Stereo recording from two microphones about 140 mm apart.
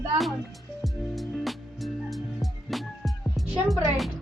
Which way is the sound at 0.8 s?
Centre (ahead or behind).